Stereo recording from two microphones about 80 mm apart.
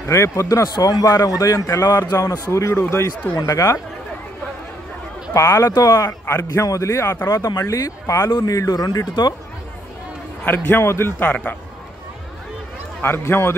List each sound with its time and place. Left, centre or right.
0.0 s a man's voice: left
2.5 s a man's voice: left
3.3 s a man's voice: left
5.3 s a man's voice: left
6.0 s a man's voice: left
10.4 s a man's voice: left
13.0 s a man's voice: left